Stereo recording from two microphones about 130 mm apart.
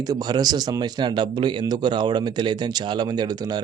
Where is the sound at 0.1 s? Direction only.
30° right (ahead or behind).